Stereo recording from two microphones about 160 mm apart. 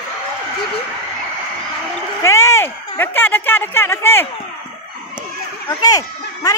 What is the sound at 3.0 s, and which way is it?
Speech, 10° left (ahead or behind).